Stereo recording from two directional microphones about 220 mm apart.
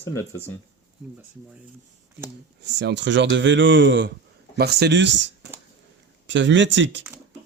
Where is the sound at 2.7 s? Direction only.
50° right (ahead or behind).